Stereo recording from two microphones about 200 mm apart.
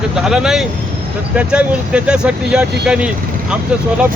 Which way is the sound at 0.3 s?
Centre (ahead or behind).